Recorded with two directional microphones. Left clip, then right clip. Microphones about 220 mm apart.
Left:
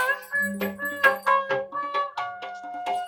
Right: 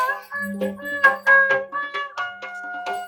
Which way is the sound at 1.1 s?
40° left (ahead or behind).